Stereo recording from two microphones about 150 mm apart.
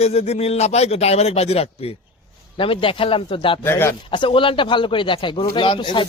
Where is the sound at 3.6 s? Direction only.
15° left (ahead or behind).